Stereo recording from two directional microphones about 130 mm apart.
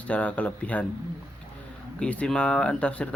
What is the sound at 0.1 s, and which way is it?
Speech, 10° left (ahead or behind).